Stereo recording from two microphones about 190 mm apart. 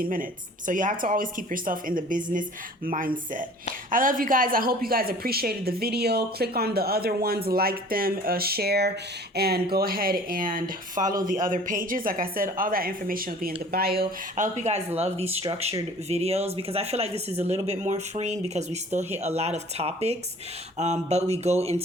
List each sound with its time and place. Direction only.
0.0 s a woman's voice: 45° right (ahead or behind)
11.0 s speech: 20° right (ahead or behind)
11.3 s a woman's voice: 45° right (ahead or behind)